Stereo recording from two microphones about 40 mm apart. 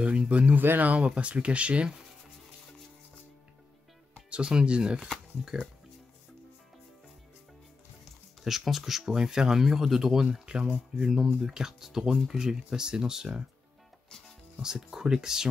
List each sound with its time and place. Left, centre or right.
0.0 s speech: right
0.6 s speech: right
0.9 s speech: right
4.3 s speech: right
8.5 s speech: centre
10.4 s speech: centre
14.6 s speech: centre